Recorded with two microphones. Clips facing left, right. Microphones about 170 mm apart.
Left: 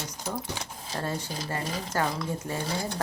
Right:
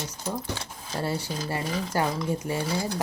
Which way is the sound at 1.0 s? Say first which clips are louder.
Right 4 dB; 10° right (ahead or behind).